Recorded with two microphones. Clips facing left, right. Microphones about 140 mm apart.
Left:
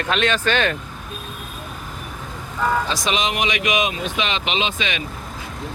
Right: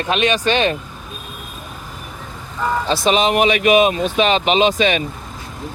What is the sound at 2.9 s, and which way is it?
Speech, 35° right (ahead or behind).